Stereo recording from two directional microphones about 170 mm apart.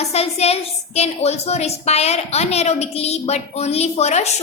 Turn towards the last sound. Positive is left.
turn(degrees=40)  # may be behind; listen again after turning